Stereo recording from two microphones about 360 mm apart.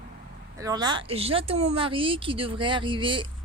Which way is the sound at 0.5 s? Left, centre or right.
Centre.